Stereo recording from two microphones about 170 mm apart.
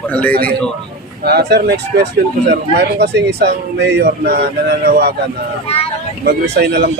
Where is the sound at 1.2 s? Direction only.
70° right (ahead or behind).